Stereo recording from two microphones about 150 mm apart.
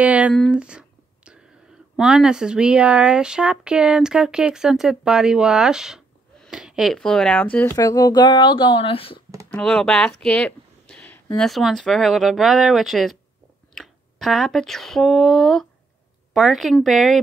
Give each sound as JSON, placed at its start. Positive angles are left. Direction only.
{"t": 0.0, "sound": "a sound", "side_deg": -10}
{"t": 2.0, "sound": "speech", "side_deg": -5}
{"t": 7.7, "sound": "speech", "side_deg": 25}
{"t": 9.5, "sound": "speech", "side_deg": 5}